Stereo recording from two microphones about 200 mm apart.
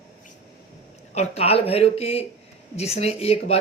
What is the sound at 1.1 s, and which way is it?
Speech, 30° left (ahead or behind).